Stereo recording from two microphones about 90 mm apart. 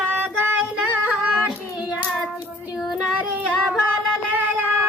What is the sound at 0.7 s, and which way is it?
Female singing, 10° right (ahead or behind).